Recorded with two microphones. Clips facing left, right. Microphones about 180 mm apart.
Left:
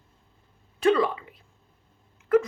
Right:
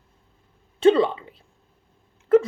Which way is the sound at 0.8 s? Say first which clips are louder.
Right 5 dB; 25° right (ahead or behind).